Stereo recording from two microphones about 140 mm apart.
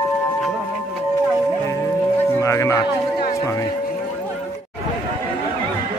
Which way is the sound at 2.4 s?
20° left (ahead or behind).